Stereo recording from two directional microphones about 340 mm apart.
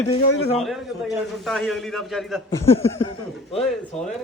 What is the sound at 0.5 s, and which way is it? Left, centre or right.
A man's voice, centre.